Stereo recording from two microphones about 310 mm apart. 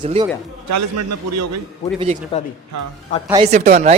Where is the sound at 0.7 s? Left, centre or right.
Right.